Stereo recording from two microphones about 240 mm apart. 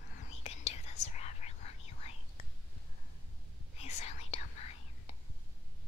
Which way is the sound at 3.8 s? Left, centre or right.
Left.